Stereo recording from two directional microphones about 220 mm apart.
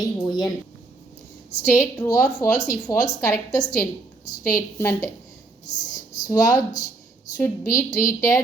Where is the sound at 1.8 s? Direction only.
15° left (ahead or behind).